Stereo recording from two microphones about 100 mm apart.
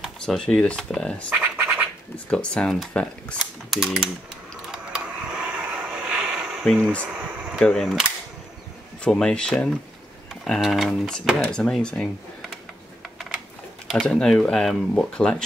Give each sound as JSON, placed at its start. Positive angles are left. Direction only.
{"t": 0.2, "sound": "speech", "side_deg": 10}
{"t": 1.3, "sound": "scratch", "side_deg": -20}
{"t": 2.1, "sound": "speech", "side_deg": 10}
{"t": 3.3, "sound": "speech", "side_deg": 0}
{"t": 4.6, "sound": "mechanisms", "side_deg": -10}
{"t": 7.0, "sound": "speech", "side_deg": -10}
{"t": 7.5, "sound": "speech", "side_deg": 0}
{"t": 9.0, "sound": "speech", "side_deg": 10}
{"t": 13.0, "sound": "typing", "side_deg": -5}
{"t": 14.0, "sound": "speech", "side_deg": 5}